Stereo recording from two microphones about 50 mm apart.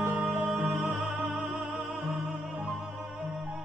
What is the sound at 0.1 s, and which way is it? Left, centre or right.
Music, right.